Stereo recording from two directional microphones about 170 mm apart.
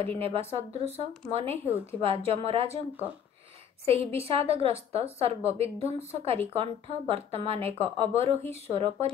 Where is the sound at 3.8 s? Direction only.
35° right (ahead or behind).